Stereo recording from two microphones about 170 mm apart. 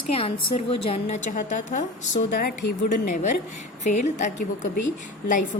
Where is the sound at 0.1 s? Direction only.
35° left (ahead or behind).